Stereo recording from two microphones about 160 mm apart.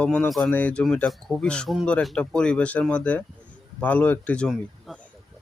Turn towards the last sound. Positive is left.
turn(degrees=0)  # may be behind; listen again after turning